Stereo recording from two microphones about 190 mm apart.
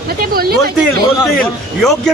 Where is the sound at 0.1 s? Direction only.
55° right (ahead or behind).